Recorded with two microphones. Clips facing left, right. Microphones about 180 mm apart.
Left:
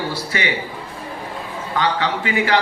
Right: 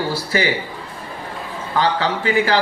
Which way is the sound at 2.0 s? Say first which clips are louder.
Right 2 dB; 35° right (ahead or behind).